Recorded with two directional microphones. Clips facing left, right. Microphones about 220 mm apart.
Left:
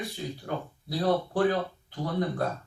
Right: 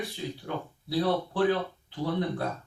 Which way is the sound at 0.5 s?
45° left (ahead or behind).